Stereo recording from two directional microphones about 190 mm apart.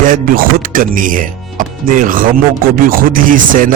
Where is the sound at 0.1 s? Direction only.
45° right (ahead or behind).